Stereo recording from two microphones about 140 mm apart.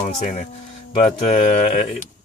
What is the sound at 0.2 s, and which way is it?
Speech, 60° left (ahead or behind).